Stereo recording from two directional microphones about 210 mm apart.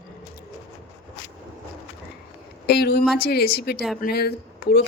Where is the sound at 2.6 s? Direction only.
50° left (ahead or behind).